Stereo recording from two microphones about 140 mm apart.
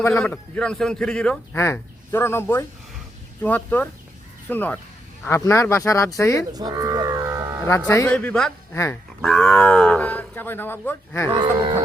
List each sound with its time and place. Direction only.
0.0 s a man's voice: 15° left (ahead or behind)
1.5 s speech: 15° left (ahead or behind)
6.5 s speech: 25° right (ahead or behind)
7.9 s speech: 15° left (ahead or behind)
8.7 s speech: 20° left (ahead or behind)
9.2 s speech: 5° left (ahead or behind)
11.3 s cattle: 35° right (ahead or behind)